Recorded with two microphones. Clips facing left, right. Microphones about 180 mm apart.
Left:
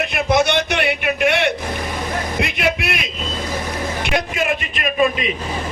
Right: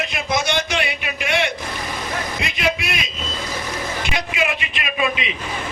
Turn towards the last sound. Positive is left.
turn(degrees=45)  # may be behind; listen again after turning